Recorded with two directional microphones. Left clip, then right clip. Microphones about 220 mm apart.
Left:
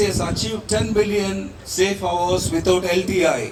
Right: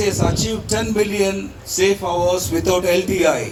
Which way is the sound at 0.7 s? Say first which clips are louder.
Even; 20° right (ahead or behind).